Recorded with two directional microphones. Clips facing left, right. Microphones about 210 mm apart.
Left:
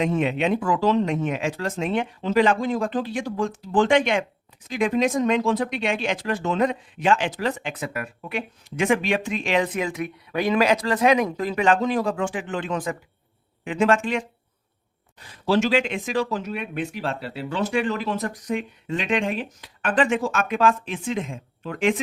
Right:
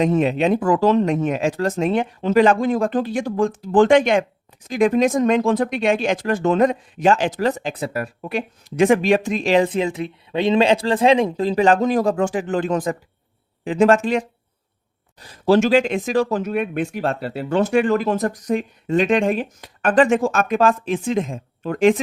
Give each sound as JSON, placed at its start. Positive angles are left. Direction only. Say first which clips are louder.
{"t": 0.0, "sound": "speech", "louder": "right 5 dB", "side_deg": -40}